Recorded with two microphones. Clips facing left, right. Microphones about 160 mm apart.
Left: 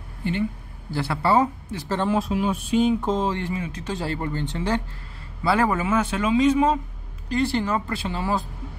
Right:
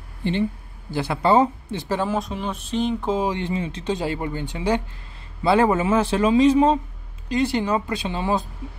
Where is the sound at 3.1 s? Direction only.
15° right (ahead or behind); by 6.8 s 30° right (ahead or behind).